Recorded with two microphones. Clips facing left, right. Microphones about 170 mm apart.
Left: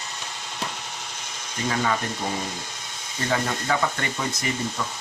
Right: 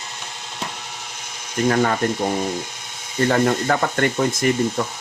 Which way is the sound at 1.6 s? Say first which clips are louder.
Right 6 dB; 55° right (ahead or behind).